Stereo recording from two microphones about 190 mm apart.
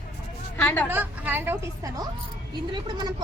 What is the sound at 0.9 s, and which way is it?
A woman's voice, 10° right (ahead or behind).